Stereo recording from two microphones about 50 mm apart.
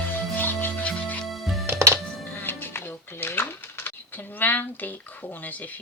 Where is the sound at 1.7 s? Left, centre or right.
Right.